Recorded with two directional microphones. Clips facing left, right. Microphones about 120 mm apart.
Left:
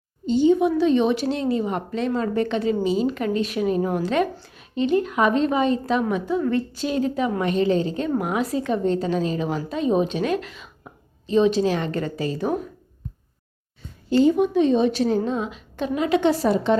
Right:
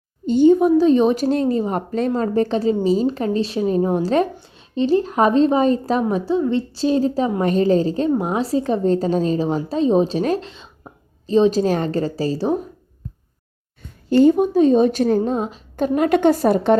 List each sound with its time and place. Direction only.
0.3 s a woman's voice: 50° right (ahead or behind); by 12.5 s 35° right (ahead or behind)
14.1 s a woman's voice: 50° right (ahead or behind)